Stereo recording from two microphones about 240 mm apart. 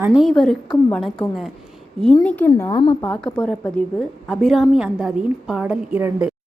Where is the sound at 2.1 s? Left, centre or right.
Centre.